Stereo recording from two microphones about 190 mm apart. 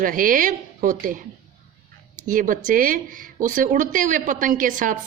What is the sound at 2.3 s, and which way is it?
Speech, 45° right (ahead or behind).